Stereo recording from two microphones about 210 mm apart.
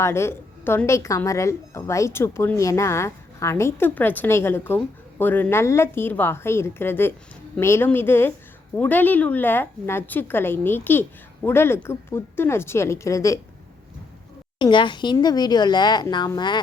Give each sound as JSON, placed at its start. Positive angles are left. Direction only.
{"t": 0.0, "sound": "a woman's voice", "side_deg": 10}
{"t": 14.6, "sound": "speech", "side_deg": 20}